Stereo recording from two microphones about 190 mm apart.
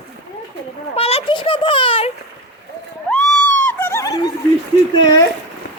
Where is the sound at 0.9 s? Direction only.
30° left (ahead or behind).